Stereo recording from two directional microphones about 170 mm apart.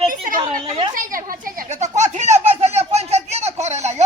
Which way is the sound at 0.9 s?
55° right (ahead or behind).